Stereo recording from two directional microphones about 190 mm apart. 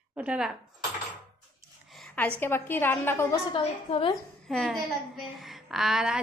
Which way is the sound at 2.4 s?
10° left (ahead or behind).